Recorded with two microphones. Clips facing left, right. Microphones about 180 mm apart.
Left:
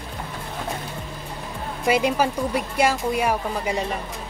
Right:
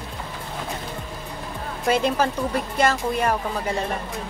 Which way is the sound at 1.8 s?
10° left (ahead or behind).